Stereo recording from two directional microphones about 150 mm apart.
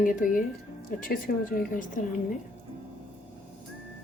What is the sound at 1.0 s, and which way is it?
Speech, 75° left (ahead or behind).